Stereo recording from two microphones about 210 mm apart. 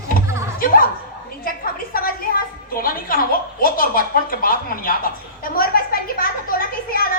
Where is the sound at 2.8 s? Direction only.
45° left (ahead or behind).